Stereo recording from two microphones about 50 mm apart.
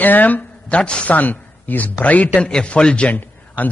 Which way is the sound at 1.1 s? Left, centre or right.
Left.